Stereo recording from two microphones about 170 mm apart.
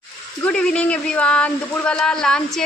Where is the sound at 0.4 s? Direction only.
5° left (ahead or behind).